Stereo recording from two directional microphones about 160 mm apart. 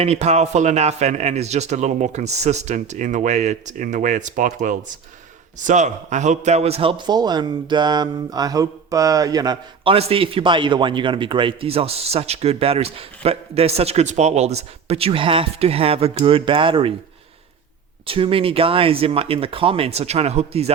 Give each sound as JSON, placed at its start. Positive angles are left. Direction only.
{"t": 0.0, "sound": "a man's voice", "side_deg": -40}
{"t": 9.9, "sound": "a man's voice", "side_deg": -35}
{"t": 18.0, "sound": "a man's voice", "side_deg": -35}